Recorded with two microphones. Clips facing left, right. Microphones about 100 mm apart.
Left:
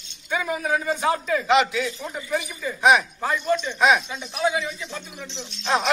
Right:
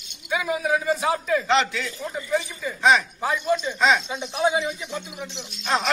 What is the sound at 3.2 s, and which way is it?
Speech, 10° right (ahead or behind).